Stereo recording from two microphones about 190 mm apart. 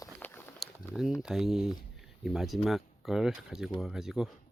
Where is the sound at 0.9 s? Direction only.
Centre (ahead or behind).